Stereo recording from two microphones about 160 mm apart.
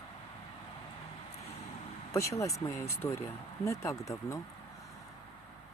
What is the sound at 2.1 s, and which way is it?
Speech, 20° left (ahead or behind).